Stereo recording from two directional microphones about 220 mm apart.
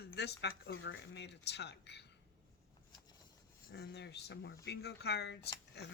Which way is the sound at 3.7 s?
50° left (ahead or behind).